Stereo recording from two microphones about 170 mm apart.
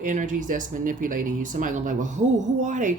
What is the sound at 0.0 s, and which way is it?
Speech, 50° right (ahead or behind).